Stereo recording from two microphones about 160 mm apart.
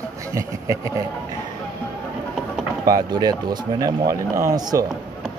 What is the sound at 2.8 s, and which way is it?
Speech, 25° right (ahead or behind).